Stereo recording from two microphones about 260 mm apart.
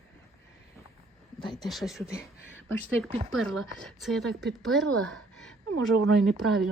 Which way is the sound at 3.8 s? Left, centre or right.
Centre.